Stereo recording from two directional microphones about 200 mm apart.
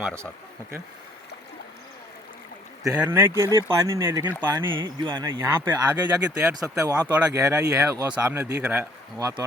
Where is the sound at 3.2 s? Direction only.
15° right (ahead or behind).